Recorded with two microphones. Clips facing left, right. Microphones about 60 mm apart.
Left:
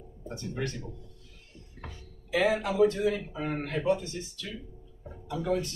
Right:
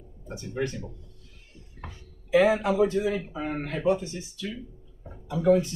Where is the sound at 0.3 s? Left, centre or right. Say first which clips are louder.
Right 4 dB; centre.